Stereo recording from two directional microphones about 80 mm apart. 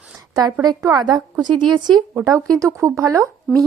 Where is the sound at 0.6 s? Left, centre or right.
Right.